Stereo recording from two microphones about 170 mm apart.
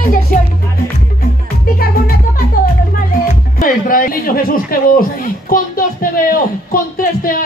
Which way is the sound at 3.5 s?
55° left (ahead or behind).